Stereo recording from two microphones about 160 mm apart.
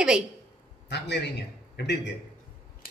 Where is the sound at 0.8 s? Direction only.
90° left.